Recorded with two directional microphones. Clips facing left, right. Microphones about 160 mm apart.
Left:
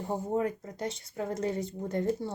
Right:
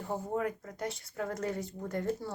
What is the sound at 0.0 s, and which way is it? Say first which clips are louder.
Speech: left 3 dB; 25° left (ahead or behind).